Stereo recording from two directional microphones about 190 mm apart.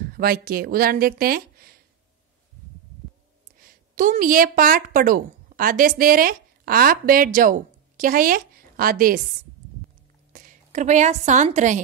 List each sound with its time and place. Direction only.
0.1 s speech: 50° right (ahead or behind)
3.5 s a woman's voice: 45° right (ahead or behind)
10.3 s a woman's voice: 45° right (ahead or behind)